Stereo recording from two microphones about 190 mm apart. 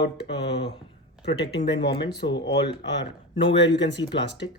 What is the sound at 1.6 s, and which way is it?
Speech, 65° left (ahead or behind).